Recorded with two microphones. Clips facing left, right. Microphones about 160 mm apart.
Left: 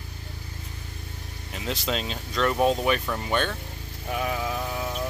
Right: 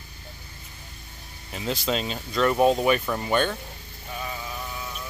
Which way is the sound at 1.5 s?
Centre (ahead or behind).